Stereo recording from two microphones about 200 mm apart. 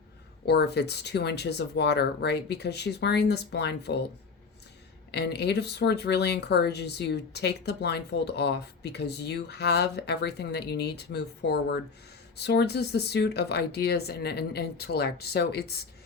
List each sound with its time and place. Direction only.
0.4 s speech: 55° left (ahead or behind)
5.1 s speech: 55° left (ahead or behind)